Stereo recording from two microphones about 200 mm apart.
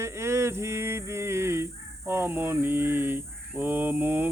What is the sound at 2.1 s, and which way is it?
Mantra, 10° right (ahead or behind).